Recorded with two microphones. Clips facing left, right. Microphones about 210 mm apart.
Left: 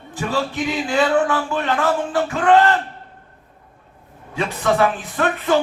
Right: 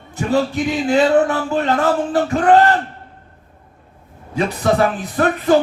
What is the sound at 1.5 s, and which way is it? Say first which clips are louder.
Speech: right 5 dB; 40° right (ahead or behind).